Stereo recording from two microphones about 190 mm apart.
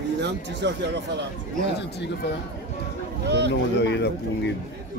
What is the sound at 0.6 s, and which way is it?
Speech, 65° right (ahead or behind).